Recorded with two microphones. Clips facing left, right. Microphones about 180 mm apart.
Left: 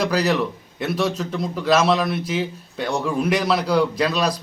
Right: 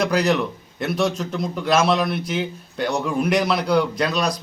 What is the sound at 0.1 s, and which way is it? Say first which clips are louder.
A man's voice: right 1 dB; 5° left (ahead or behind).